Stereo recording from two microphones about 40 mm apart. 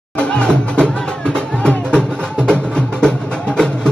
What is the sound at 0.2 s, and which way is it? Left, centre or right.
Music, left.